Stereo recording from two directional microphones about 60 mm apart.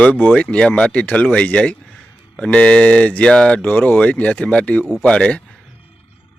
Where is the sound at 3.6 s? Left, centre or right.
Left.